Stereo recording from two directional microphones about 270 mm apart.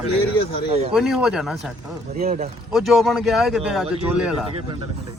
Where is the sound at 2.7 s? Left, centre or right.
Centre.